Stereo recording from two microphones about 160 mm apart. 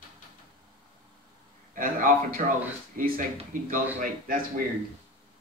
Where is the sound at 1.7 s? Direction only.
60° right (ahead or behind).